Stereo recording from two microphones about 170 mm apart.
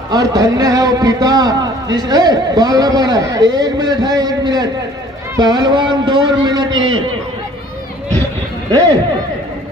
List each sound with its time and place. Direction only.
0.1 s a man's voice: 20° right (ahead or behind)